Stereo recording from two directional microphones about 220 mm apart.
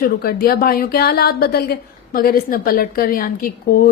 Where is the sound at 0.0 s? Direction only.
45° left (ahead or behind).